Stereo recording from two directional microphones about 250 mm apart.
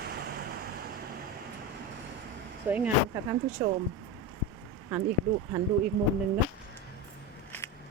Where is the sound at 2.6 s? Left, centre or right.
Centre.